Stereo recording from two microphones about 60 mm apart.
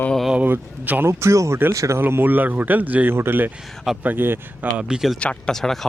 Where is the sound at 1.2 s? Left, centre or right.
Right.